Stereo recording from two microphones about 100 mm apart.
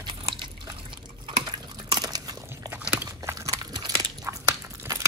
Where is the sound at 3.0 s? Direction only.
30° right (ahead or behind).